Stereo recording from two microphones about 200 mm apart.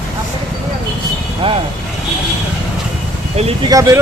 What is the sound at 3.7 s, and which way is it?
Speech, 15° right (ahead or behind).